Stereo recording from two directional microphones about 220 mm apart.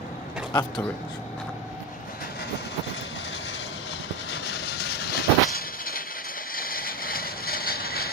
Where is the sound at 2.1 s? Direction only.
45° left (ahead or behind).